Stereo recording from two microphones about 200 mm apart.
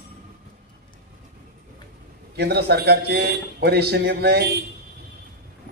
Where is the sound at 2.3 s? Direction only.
55° right (ahead or behind).